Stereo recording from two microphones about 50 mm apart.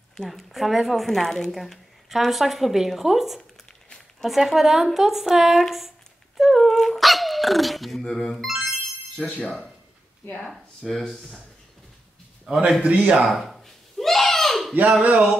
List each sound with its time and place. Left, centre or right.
0.2 s speech: centre
2.0 s speech: centre
8.5 s music: centre
9.1 s speech: left
10.4 s speech: centre
12.4 s a man's voice: centre
13.2 s a sound: centre
15.0 s speech: centre